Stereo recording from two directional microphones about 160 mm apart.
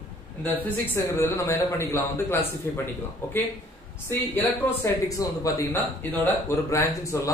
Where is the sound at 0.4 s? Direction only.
10° left (ahead or behind).